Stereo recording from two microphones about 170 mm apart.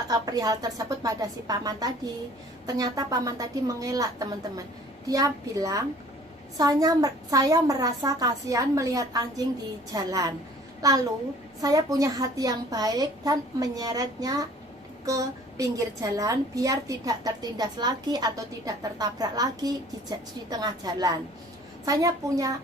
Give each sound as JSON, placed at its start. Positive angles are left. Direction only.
{"t": 0.1, "sound": "a woman's voice", "side_deg": -20}